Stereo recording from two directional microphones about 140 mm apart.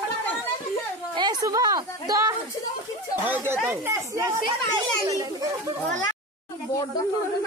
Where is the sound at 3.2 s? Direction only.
15° right (ahead or behind).